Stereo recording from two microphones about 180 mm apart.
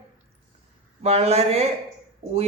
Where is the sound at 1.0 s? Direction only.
35° right (ahead or behind).